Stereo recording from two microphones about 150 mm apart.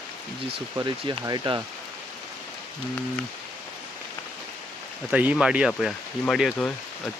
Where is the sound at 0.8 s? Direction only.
25° right (ahead or behind).